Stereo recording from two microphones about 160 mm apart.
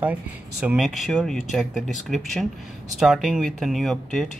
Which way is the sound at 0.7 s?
5° right (ahead or behind).